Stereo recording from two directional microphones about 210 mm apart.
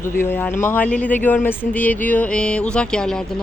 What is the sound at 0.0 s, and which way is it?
Speech, 10° left (ahead or behind).